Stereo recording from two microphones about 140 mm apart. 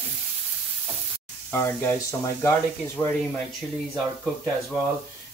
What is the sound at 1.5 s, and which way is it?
Speech, 15° left (ahead or behind).